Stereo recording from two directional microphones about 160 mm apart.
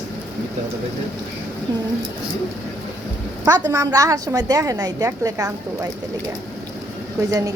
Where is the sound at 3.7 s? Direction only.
20° right (ahead or behind).